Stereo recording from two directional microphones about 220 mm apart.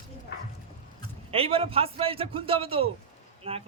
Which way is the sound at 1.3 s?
25° right (ahead or behind).